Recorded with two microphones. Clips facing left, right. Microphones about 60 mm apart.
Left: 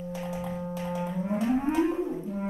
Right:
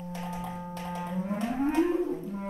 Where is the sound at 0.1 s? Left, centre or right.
Centre.